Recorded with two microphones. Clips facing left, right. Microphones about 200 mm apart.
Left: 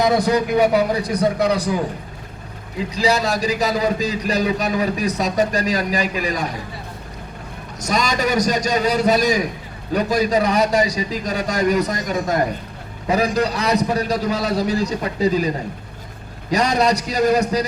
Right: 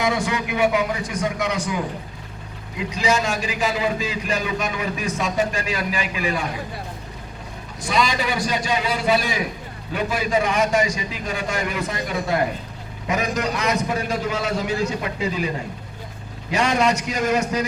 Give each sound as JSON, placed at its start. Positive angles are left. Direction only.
{"t": 0.0, "sound": "a man's voice", "side_deg": 40}
{"t": 7.8, "sound": "a man's voice", "side_deg": 45}